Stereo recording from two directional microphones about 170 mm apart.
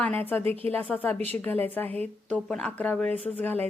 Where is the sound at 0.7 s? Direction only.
10° left (ahead or behind).